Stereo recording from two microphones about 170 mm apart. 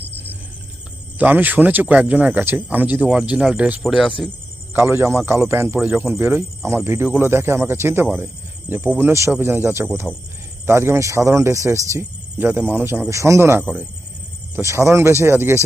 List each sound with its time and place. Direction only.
1.2 s speech: 10° right (ahead or behind)
4.7 s speech: 15° right (ahead or behind)